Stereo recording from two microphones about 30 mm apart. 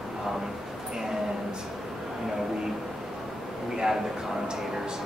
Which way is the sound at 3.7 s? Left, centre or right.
Centre.